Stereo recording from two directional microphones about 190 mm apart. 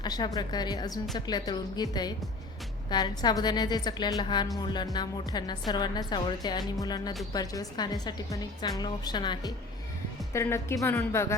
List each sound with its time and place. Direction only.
0.0 s a woman's voice: 20° left (ahead or behind)